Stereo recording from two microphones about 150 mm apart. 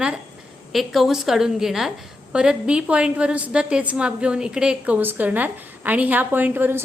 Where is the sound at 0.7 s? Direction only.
Centre (ahead or behind).